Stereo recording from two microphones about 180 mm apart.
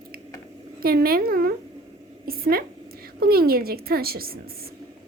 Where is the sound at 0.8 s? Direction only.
55° right (ahead or behind).